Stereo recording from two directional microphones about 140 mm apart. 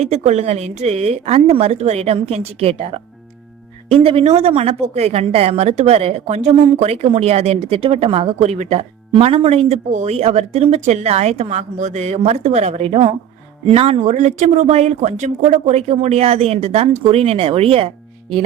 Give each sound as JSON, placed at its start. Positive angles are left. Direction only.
{"t": 0.0, "sound": "speech", "side_deg": -50}